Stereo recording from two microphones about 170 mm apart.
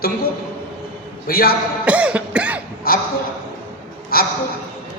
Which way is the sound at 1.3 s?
60° left (ahead or behind).